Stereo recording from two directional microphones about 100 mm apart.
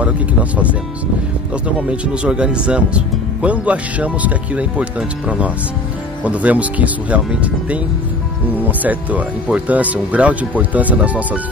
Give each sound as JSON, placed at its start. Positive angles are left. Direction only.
{"t": 0.0, "sound": "speech", "side_deg": -15}
{"t": 1.8, "sound": "speech", "side_deg": -10}